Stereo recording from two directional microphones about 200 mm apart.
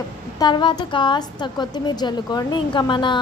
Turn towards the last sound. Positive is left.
turn(degrees=25)  # may be behind; listen again after turning